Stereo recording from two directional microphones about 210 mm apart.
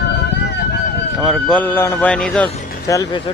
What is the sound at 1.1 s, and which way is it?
Speech, centre (ahead or behind).